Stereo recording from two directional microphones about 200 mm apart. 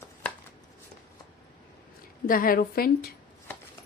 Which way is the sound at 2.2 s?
45° left (ahead or behind).